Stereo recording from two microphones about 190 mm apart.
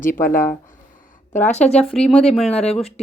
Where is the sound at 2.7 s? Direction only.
30° left (ahead or behind).